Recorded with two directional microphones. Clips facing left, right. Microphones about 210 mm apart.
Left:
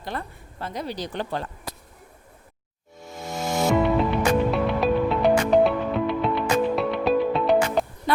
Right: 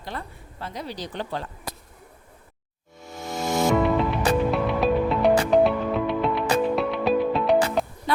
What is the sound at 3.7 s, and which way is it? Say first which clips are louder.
Music: left 1 dB; centre (ahead or behind).